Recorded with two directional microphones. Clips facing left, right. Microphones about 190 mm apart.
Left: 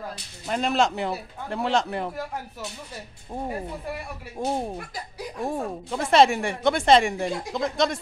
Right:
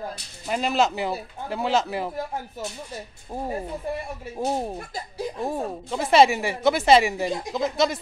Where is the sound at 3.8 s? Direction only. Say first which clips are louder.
Right 4 dB; 25° right (ahead or behind).